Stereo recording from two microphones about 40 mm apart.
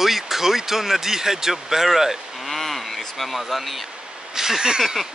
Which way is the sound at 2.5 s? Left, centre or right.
Centre.